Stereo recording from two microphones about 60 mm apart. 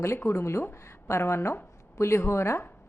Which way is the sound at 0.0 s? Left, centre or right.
Left.